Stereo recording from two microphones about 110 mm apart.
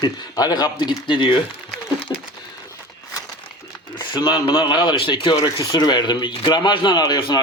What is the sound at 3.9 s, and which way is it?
Speech, 45° left (ahead or behind).